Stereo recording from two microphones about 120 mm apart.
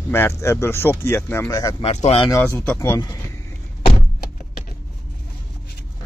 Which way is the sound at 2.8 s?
25° left (ahead or behind).